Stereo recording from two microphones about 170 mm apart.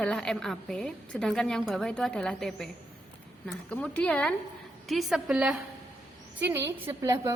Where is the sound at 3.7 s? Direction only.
5° left (ahead or behind); by 7.3 s 15° right (ahead or behind).